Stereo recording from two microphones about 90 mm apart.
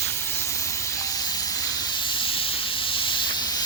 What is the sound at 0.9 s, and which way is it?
Hiss, 40° left (ahead or behind).